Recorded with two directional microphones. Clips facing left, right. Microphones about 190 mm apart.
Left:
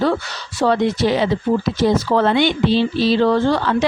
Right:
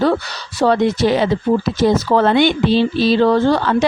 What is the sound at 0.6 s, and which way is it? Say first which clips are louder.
A woman's voice: right 2 dB; 45° right (ahead or behind).